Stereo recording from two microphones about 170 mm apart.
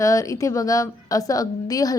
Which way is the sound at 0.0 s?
20° left (ahead or behind).